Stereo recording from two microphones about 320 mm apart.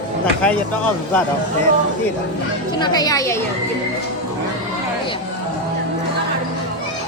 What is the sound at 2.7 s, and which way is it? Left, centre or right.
Speech, centre.